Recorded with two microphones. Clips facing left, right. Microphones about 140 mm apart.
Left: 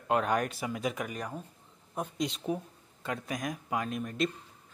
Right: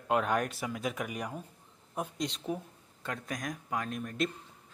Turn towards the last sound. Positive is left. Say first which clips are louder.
# left 2 dB
turn(degrees=0)  # may be behind; listen again after turning